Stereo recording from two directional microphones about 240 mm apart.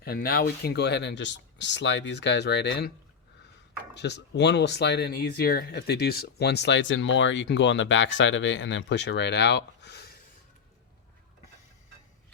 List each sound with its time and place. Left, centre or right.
0.0 s speech: left
3.9 s speech: left